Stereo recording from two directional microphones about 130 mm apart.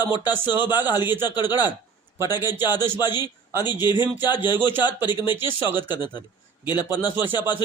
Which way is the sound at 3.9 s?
15° right (ahead or behind).